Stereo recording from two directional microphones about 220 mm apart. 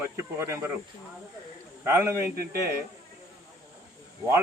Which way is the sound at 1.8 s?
10° right (ahead or behind).